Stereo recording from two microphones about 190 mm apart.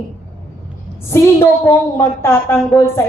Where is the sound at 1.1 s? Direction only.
15° left (ahead or behind).